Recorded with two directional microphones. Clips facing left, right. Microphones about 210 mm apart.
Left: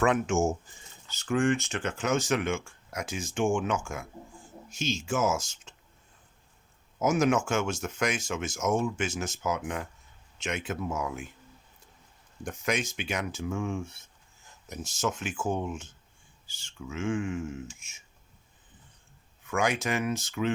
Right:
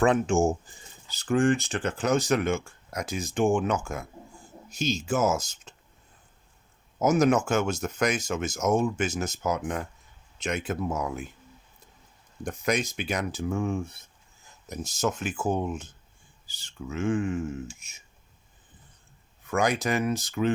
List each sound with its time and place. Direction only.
0.0 s speech: 30° right (ahead or behind)
7.0 s speech: 40° right (ahead or behind)
12.4 s speech: 35° right (ahead or behind)
19.5 s speech: 35° right (ahead or behind)